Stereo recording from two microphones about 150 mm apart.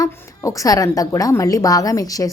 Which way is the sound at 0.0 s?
20° left (ahead or behind).